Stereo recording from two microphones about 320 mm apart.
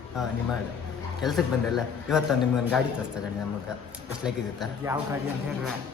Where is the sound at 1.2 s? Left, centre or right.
Centre.